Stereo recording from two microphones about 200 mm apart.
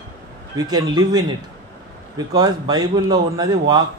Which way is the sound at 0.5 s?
20° right (ahead or behind).